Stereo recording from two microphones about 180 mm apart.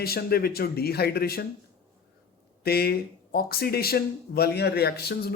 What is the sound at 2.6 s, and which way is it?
Speech, 60° left (ahead or behind).